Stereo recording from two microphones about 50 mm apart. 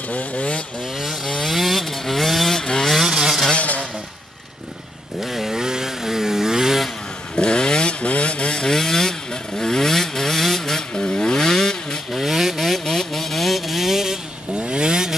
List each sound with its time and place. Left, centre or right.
0.1 s vehicle: left
0.9 s chainsaw: centre
2.9 s vehicle: centre
3.4 s a sound: left
5.2 s vehicle: centre
7.3 s vehicle: centre
10.9 s vehicle: centre
12.1 s vehicle: centre